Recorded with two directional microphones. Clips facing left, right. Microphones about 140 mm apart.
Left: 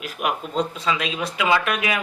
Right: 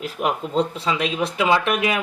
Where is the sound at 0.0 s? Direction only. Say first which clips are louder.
Right 2 dB; 30° right (ahead or behind).